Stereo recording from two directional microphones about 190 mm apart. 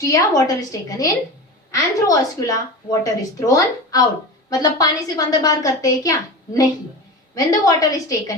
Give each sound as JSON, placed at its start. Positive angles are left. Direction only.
{"t": 0.0, "sound": "a woman's voice", "side_deg": 20}